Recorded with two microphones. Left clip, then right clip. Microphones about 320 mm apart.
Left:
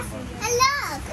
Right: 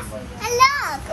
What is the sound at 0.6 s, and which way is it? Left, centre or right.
Children playing, centre.